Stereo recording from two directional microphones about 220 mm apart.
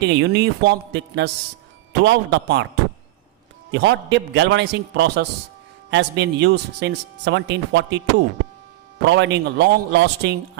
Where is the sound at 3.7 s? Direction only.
55° right (ahead or behind).